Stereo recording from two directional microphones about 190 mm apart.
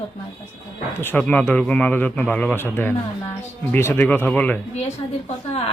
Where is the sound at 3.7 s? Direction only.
10° left (ahead or behind).